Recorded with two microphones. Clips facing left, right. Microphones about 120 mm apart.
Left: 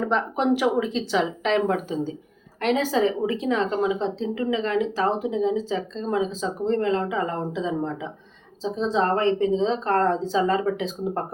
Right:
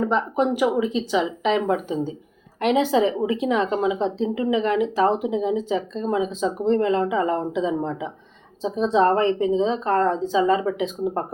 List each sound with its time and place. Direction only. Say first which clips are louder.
0.1 s a woman's voice: right 1 dB; 10° right (ahead or behind)